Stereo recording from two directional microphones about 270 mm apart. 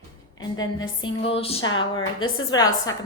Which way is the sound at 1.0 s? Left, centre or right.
Centre.